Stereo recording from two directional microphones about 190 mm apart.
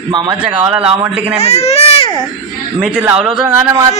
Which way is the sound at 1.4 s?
35° left (ahead or behind).